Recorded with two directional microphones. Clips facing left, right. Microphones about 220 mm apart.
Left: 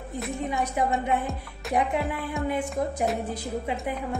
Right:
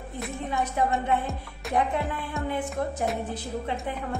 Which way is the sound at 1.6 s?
Centre (ahead or behind).